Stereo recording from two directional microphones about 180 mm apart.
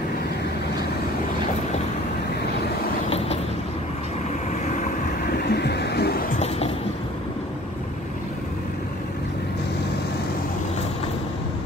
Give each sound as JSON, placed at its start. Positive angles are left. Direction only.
{"t": 5.5, "sound": "vehicle", "side_deg": 65}